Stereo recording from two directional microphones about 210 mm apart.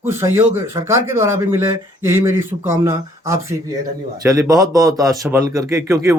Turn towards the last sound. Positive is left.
turn(degrees=-15)  # may be behind; listen again after turning